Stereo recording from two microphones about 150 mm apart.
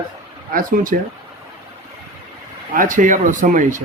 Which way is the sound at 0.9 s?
60° right (ahead or behind).